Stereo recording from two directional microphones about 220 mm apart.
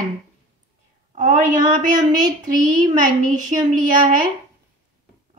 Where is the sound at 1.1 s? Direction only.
35° right (ahead or behind).